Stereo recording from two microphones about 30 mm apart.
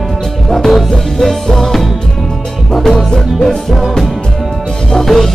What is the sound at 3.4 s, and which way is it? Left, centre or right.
Music, centre.